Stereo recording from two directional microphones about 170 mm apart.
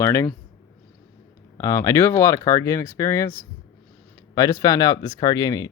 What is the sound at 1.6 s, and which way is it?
Speech, 20° left (ahead or behind).